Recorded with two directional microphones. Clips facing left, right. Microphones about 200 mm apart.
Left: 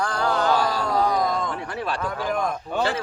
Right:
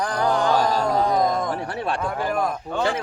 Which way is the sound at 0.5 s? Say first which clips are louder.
Right 3 dB; 40° right (ahead or behind).